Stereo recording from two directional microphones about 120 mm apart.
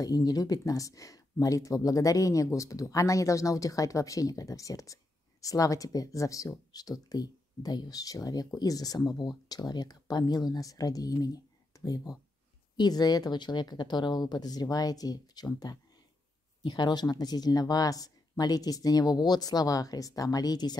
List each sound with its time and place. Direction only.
0.0 s speech: 30° left (ahead or behind)